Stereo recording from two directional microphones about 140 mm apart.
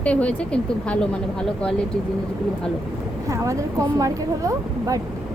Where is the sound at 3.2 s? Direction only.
20° right (ahead or behind).